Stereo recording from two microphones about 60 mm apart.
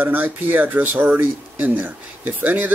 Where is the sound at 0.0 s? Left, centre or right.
Right.